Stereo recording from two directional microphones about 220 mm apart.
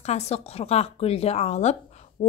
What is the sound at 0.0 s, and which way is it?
Speech, 30° left (ahead or behind).